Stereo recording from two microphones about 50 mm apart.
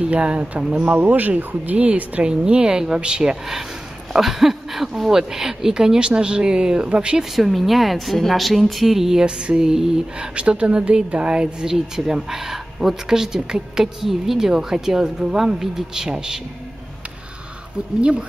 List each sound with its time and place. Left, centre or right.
0.0 s speech: right
0.8 s speech: right
2.2 s speech: centre
7.3 s a woman's voice: centre
10.3 s speech: right